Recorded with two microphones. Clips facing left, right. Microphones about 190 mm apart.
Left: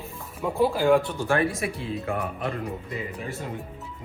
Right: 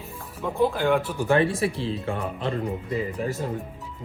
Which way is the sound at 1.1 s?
20° right (ahead or behind).